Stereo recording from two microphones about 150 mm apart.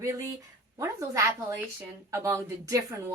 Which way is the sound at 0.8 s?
20° right (ahead or behind).